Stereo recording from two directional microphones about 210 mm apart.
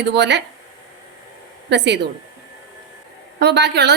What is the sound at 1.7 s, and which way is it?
Speech, 55° right (ahead or behind).